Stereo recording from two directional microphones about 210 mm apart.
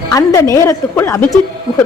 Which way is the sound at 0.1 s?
15° left (ahead or behind).